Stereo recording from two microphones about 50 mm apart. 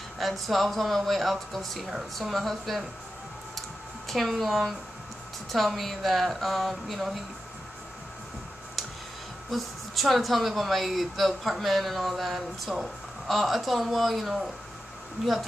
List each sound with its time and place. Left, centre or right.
0.2 s a woman's voice: centre
4.1 s a woman's voice: centre
9.5 s a woman's voice: centre